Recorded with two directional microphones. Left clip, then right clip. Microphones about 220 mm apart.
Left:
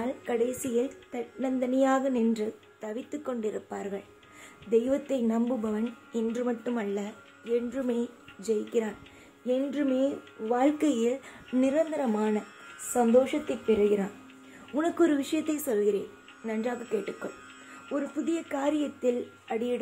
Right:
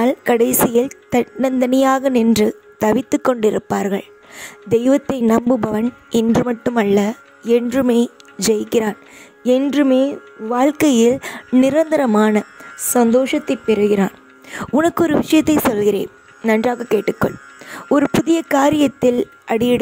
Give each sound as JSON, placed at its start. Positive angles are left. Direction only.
{"t": 0.0, "sound": "a woman's voice", "side_deg": -55}